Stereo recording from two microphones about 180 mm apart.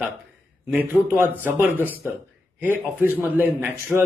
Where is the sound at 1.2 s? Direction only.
10° right (ahead or behind).